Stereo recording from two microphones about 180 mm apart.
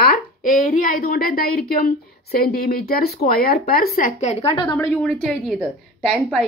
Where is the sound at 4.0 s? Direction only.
45° left (ahead or behind); by 4.8 s 30° left (ahead or behind).